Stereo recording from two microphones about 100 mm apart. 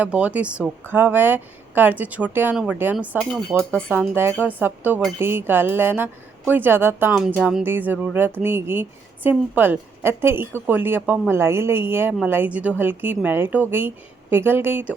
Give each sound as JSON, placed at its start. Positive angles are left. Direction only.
{"t": 0.0, "sound": "speech", "side_deg": -15}
{"t": 3.6, "sound": "speech", "side_deg": 10}
{"t": 4.1, "sound": "speech", "side_deg": -25}